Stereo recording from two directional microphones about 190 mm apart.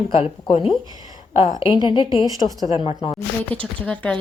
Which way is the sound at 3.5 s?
5° left (ahead or behind).